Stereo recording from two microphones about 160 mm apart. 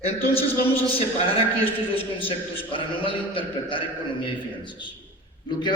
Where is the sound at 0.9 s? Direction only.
35° left (ahead or behind).